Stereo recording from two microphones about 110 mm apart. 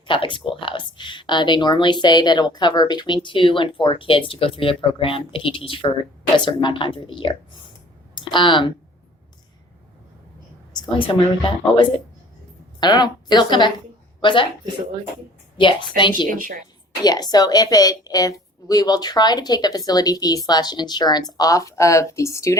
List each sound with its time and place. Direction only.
0.0 s speech: 50° left (ahead or behind)
10.8 s speech: 50° left (ahead or behind)
12.8 s a woman's voice: 40° left (ahead or behind)
15.5 s a woman's voice: 45° left (ahead or behind); by 22.5 s 25° left (ahead or behind)